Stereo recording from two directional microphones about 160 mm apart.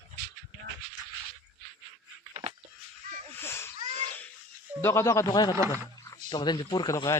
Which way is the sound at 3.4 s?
15° left (ahead or behind).